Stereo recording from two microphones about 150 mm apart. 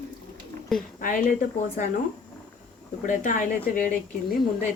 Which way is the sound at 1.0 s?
60° left (ahead or behind).